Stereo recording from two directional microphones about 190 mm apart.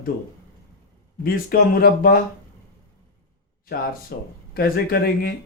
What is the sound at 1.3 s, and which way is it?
Speech, 50° left (ahead or behind).